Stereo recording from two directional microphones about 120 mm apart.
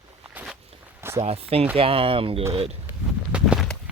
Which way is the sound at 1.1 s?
55° right (ahead or behind).